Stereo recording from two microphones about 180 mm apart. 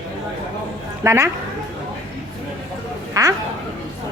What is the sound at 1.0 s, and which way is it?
Speech, 15° right (ahead or behind).